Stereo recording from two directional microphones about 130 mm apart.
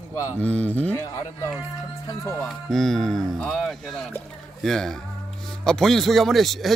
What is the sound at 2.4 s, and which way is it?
Speech, 5° left (ahead or behind).